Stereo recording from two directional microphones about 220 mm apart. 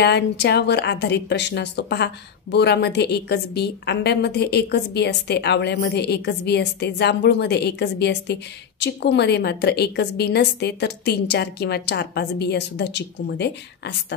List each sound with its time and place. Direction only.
0.0 s a woman's voice: 50° left (ahead or behind)